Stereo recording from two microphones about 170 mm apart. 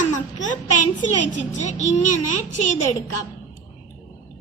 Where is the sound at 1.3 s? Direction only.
45° left (ahead or behind).